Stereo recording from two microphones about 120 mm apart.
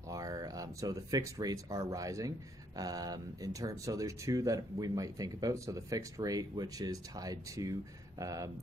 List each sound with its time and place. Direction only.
0.1 s speech: 30° right (ahead or behind)